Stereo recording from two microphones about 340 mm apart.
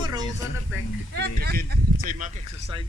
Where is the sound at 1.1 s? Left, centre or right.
Right.